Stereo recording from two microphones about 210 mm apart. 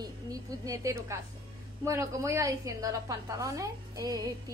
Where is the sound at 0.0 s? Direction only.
15° right (ahead or behind).